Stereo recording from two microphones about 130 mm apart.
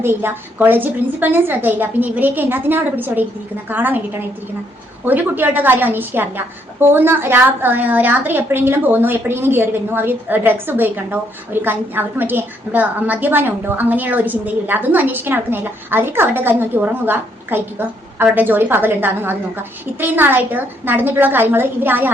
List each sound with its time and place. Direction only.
0.0 s a woman's voice: 15° right (ahead or behind)